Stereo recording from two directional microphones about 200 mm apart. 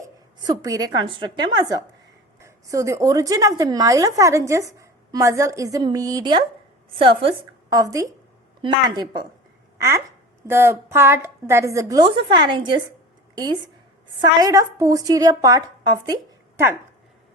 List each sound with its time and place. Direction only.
0.4 s a woman's voice: 20° right (ahead or behind)